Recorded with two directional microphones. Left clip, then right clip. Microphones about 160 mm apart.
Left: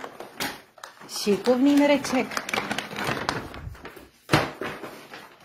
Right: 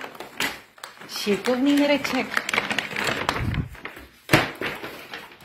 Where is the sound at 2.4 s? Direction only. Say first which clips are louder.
Right 4 dB; 75° left (ahead or behind).